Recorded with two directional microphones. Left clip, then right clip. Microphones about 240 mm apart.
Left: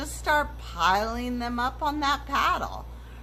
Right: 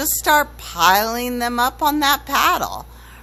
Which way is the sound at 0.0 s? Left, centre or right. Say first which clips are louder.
Right 9 dB; right.